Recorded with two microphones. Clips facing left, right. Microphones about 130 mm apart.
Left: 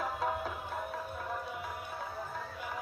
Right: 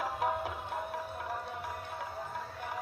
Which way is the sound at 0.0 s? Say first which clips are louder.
Right 1 dB; 15° right (ahead or behind).